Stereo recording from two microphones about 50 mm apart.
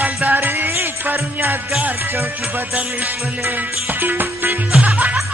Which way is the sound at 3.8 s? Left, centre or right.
Right.